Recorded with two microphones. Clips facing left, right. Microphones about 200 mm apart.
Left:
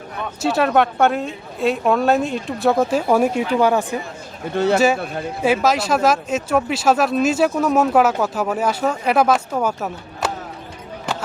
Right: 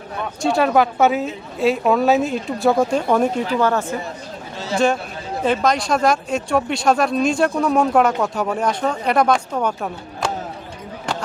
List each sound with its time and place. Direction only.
0.4 s speech: centre (ahead or behind)
4.5 s speech: 60° left (ahead or behind)
5.4 s speech: 5° left (ahead or behind)